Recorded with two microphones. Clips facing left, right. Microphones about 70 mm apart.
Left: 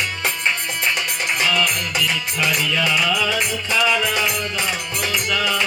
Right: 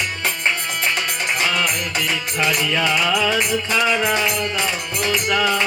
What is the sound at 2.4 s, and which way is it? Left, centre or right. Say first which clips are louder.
Music: right 2 dB; right.